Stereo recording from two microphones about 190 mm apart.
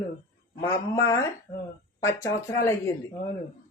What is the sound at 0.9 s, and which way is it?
Speech, 15° left (ahead or behind).